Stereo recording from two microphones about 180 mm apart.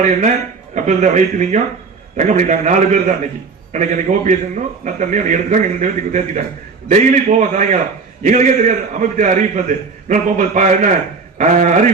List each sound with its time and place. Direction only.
0.9 s a man's voice: 40° right (ahead or behind)